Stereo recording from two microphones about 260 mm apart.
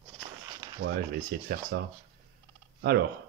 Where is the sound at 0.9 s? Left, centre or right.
Right.